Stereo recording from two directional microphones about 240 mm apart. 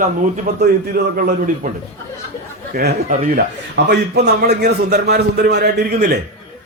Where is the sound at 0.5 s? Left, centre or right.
Right.